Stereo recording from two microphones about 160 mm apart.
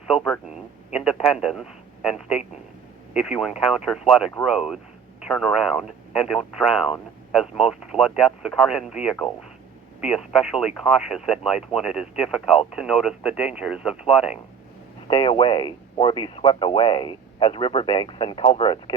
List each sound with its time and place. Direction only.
0.1 s a man's voice: centre (ahead or behind)
15.0 s speech: 35° left (ahead or behind)